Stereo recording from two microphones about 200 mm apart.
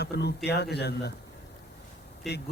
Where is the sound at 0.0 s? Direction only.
55° left (ahead or behind).